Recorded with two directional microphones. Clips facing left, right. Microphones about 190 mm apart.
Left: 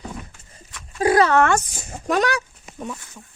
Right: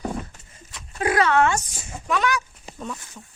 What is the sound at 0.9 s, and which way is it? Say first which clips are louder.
Dog: left 3 dB; 35° left (ahead or behind).